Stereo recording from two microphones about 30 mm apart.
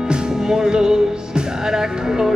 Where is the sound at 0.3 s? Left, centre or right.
Centre.